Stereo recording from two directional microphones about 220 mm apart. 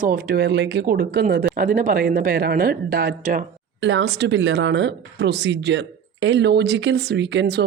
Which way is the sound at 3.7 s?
55° right (ahead or behind).